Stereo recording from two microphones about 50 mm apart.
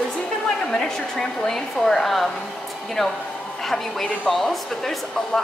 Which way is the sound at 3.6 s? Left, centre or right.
Centre.